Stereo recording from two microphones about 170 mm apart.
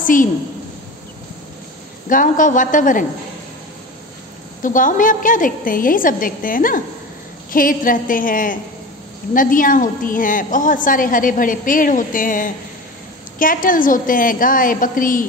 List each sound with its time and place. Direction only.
0.0 s a woman's voice: 50° left (ahead or behind)
2.0 s a woman's voice: 50° left (ahead or behind)
4.6 s a woman's voice: 50° left (ahead or behind)